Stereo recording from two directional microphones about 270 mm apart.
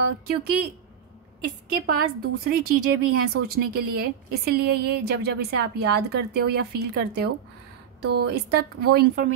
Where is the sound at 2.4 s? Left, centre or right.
Right.